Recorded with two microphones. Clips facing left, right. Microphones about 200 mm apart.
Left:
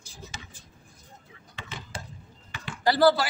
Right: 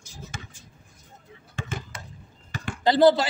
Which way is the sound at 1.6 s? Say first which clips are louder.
Right 8 dB; 45° right (ahead or behind).